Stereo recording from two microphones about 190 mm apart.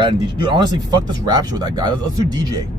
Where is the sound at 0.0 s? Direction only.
25° right (ahead or behind).